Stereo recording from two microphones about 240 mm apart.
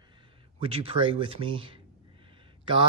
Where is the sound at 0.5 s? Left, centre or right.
Right.